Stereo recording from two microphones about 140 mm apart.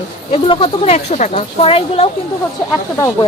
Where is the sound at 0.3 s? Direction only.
40° left (ahead or behind).